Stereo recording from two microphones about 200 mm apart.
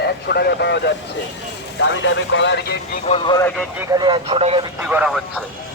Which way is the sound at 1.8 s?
70° left (ahead or behind).